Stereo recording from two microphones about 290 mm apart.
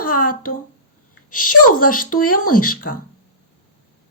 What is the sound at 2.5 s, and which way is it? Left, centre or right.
Speech, left.